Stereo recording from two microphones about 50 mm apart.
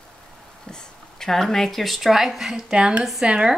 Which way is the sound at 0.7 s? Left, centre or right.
Centre.